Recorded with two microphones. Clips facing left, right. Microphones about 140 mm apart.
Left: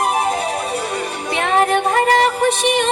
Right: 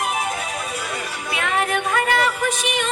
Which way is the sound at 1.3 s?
30° left (ahead or behind).